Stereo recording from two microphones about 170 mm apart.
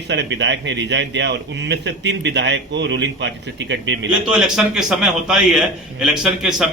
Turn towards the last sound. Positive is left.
turn(degrees=-5)  # may be behind; listen again after turning